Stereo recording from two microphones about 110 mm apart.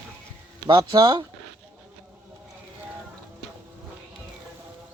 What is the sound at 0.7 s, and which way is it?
Speech, 40° right (ahead or behind).